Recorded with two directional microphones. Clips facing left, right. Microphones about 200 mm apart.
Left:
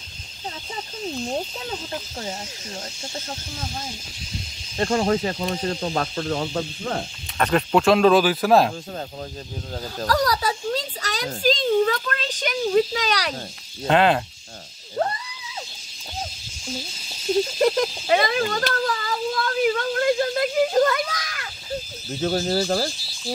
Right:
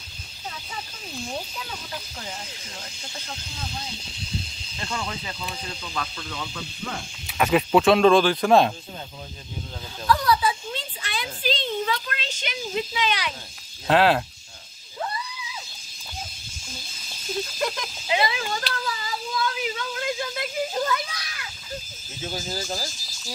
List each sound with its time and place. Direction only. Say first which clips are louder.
1.2 s cricket: left 2 dB; 30° left (ahead or behind)
3.3 s speech: left 4 dB; 50° left (ahead or behind)
7.2 s speech: right 1 dB; 5° right (ahead or behind)
9.9 s speech: even; 40° left (ahead or behind)
13.8 s speech: left 1 dB; centre (ahead or behind)
15.0 s a sound: left 6 dB; 55° left (ahead or behind)
18.0 s a sound: left 2 dB; 50° left (ahead or behind)
22.2 s speech: left 10 dB; 50° left (ahead or behind)